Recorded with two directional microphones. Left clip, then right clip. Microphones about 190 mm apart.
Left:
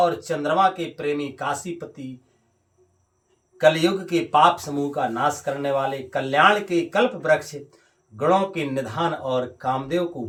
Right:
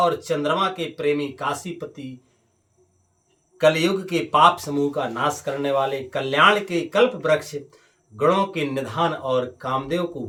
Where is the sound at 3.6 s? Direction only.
20° right (ahead or behind).